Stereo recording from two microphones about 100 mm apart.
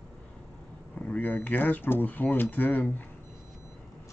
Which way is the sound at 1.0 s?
15° left (ahead or behind).